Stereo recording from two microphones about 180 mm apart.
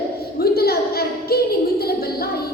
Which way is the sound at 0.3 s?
60° left (ahead or behind).